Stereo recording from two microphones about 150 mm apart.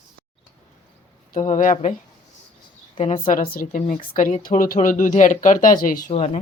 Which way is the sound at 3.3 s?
75° left (ahead or behind).